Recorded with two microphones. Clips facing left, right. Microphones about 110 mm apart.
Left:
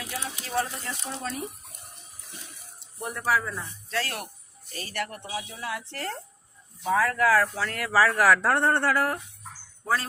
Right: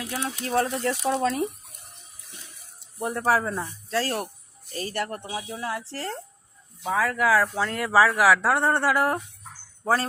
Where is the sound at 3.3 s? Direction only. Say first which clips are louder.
Right 3 dB; 45° right (ahead or behind).